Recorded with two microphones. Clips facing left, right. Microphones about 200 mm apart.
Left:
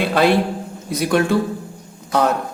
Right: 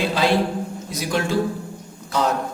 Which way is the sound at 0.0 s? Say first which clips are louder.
Left 4 dB; 60° left (ahead or behind).